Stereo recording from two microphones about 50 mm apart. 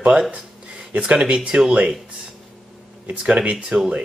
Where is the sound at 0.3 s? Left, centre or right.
Centre.